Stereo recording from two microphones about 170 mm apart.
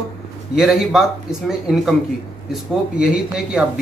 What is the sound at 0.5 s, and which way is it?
Speech, centre (ahead or behind).